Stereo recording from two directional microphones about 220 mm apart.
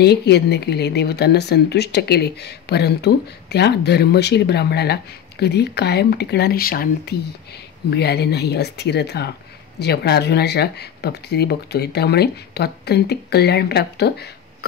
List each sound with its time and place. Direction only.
0.0 s speech: 50° left (ahead or behind)